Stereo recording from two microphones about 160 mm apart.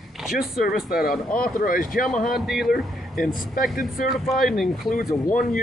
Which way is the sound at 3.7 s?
60° left (ahead or behind).